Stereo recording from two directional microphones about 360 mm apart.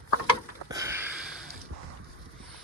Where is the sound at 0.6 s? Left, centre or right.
Centre.